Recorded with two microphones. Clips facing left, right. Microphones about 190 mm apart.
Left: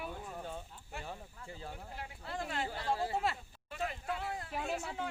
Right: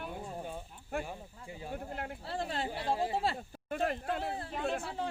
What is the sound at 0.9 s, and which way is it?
Speech, 55° right (ahead or behind).